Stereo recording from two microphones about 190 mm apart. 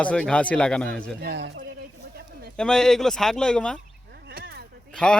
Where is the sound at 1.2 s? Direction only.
65° right (ahead or behind).